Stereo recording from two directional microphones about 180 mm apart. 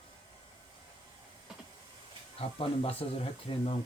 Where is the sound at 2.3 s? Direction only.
30° left (ahead or behind).